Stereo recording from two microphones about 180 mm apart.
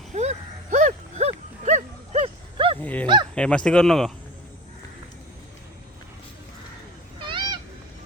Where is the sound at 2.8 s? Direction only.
10° left (ahead or behind).